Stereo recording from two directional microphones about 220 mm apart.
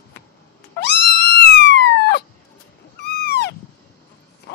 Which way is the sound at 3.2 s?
50° left (ahead or behind).